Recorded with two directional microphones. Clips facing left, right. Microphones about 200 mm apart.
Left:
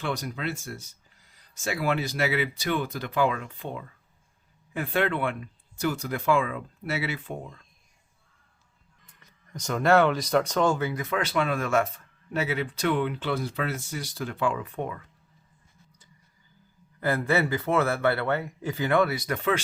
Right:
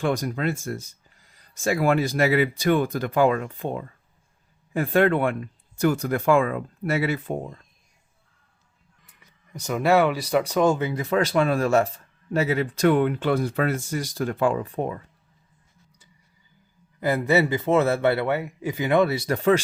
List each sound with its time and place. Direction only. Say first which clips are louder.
0.0 s speech: right 7 dB; 45° right (ahead or behind)
9.0 s speech: right 1 dB; 5° right (ahead or behind); by 15.0 s 35° right (ahead or behind)
17.0 s speech: right 4 dB; 15° right (ahead or behind); by 19.5 s 35° right (ahead or behind)